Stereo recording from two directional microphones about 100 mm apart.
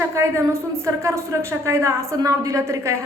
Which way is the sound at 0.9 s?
30° right (ahead or behind).